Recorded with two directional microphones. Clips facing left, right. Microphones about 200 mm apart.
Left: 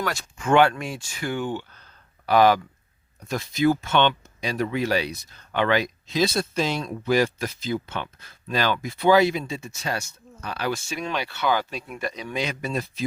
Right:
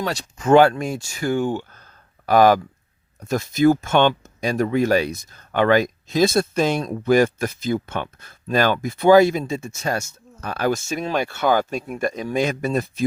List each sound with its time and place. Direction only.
0.0 s speech: 35° right (ahead or behind)